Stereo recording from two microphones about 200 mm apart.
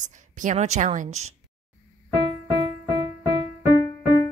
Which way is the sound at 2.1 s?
25° right (ahead or behind).